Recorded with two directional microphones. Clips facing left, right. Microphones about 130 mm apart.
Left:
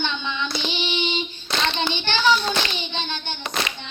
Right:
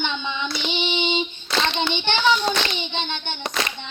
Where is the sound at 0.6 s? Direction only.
20° right (ahead or behind).